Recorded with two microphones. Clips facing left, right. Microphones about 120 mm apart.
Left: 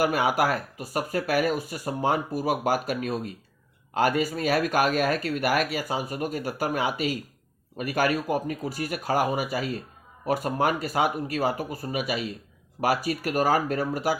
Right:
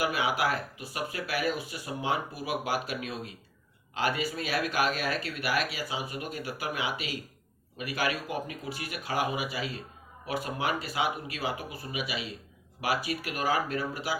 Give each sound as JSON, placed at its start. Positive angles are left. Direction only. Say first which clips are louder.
{"t": 0.0, "sound": "speech", "louder": "left 5 dB", "side_deg": 45}